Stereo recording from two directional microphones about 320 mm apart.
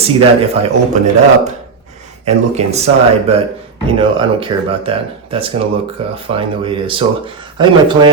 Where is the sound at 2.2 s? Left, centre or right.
Centre.